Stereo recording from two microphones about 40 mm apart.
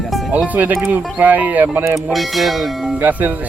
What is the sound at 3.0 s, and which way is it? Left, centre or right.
Speech, right.